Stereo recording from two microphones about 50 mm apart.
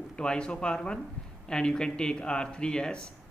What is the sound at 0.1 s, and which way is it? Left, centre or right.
A man's voice, centre.